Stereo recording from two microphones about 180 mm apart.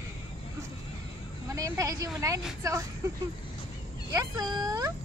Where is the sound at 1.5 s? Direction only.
20° right (ahead or behind).